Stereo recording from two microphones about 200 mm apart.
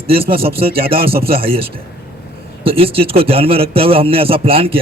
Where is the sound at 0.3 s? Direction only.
30° right (ahead or behind).